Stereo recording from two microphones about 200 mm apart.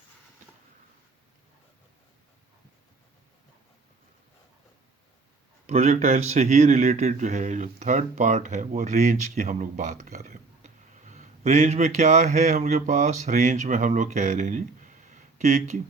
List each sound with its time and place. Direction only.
5.6 s a man's voice: 35° right (ahead or behind)